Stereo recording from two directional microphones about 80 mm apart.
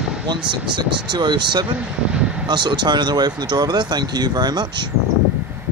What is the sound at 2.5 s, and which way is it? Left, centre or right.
Speech, right.